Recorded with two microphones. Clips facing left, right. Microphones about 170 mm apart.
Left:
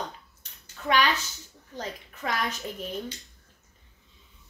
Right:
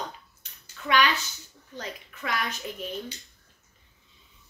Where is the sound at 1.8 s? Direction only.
35° left (ahead or behind).